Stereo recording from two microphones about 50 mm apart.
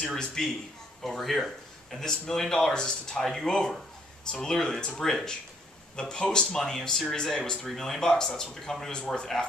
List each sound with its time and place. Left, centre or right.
0.0 s speech: centre